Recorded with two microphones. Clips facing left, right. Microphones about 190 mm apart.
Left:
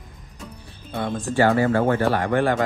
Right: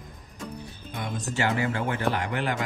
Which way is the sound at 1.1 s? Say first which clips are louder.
Left 8 dB; 40° left (ahead or behind).